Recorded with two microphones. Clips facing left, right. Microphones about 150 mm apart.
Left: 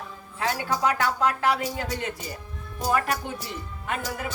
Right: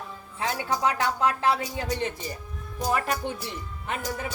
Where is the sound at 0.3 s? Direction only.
25° right (ahead or behind).